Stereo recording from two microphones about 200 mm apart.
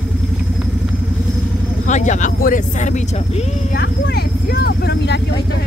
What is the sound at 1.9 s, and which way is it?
Speech, 35° left (ahead or behind).